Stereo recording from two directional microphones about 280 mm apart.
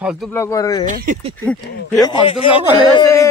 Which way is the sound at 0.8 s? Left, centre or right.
Right.